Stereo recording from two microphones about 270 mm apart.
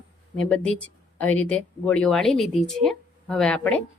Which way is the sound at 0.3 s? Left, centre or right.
Centre.